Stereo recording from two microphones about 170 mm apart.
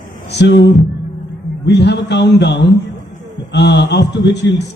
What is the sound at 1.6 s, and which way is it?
A man's voice, 85° left.